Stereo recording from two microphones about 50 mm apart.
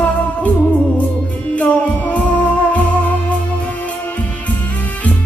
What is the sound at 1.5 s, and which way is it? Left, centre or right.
Music, left.